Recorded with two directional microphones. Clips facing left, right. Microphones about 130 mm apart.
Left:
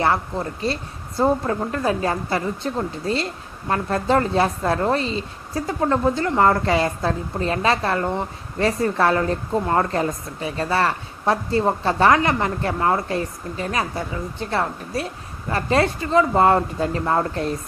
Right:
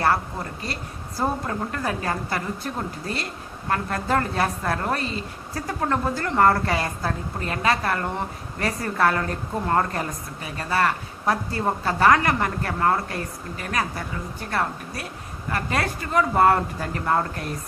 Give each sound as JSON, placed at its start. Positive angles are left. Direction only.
{"t": 0.0, "sound": "a woman's voice", "side_deg": 20}